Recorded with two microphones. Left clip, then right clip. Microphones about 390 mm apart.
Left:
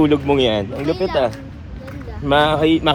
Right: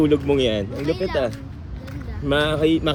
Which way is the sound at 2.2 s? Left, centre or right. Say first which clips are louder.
Left 5 dB; centre.